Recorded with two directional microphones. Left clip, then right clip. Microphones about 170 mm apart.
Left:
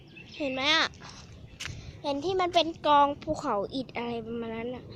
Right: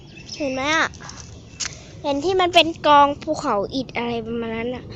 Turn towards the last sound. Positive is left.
turn(degrees=0)  # may be behind; listen again after turning